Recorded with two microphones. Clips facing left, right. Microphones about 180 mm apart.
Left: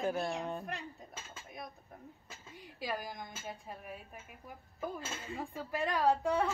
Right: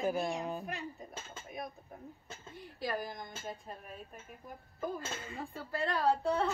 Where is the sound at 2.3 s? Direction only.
10° left (ahead or behind).